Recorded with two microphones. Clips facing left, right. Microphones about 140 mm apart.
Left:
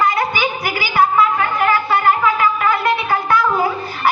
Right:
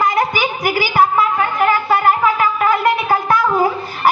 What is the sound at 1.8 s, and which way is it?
Wind instrument, 40° right (ahead or behind).